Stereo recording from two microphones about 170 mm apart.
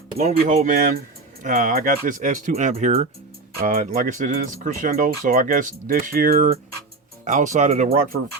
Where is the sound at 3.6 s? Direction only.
55° right (ahead or behind).